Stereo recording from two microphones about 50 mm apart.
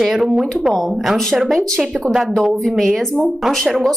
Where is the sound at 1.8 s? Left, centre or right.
Centre.